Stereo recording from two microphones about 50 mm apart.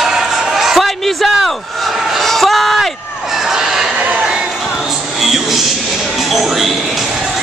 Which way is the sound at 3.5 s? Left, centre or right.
Centre.